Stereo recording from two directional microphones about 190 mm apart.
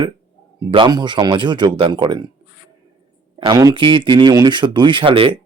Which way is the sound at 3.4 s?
20° right (ahead or behind).